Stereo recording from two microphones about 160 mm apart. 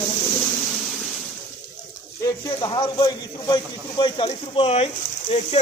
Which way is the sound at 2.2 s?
25° left (ahead or behind).